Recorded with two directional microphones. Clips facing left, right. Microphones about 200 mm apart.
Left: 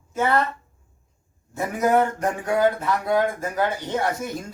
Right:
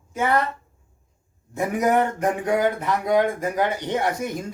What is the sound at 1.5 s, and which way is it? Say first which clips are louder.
Speech: even; 15° right (ahead or behind).